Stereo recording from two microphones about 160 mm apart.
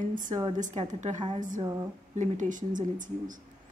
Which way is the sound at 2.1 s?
45° right (ahead or behind).